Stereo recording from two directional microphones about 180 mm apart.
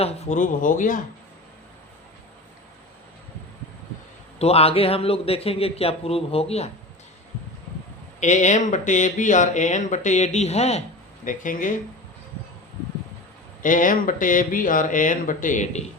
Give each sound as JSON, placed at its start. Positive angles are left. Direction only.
{"t": 0.0, "sound": "speech", "side_deg": 45}
{"t": 4.4, "sound": "a man's voice", "side_deg": 35}
{"t": 8.2, "sound": "speech", "side_deg": 40}
{"t": 11.3, "sound": "speech", "side_deg": 45}
{"t": 13.6, "sound": "speech", "side_deg": 45}